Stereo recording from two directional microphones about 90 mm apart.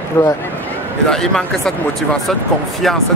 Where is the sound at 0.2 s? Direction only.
30° left (ahead or behind).